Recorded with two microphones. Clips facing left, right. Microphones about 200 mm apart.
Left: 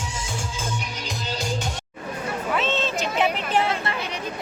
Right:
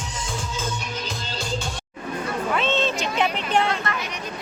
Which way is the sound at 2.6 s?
Centre (ahead or behind).